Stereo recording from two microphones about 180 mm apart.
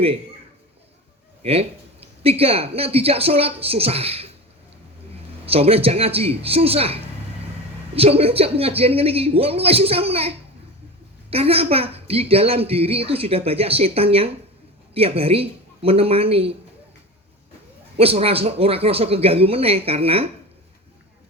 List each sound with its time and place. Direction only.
1.4 s speech: 35° right (ahead or behind)
5.5 s speech: 35° right (ahead or behind)
17.9 s speech: 35° right (ahead or behind)